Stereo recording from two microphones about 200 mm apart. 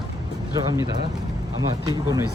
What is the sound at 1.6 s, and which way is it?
Speech, 20° right (ahead or behind).